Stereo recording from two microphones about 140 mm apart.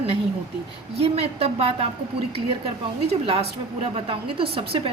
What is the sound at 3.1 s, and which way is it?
A woman's voice, 45° right (ahead or behind).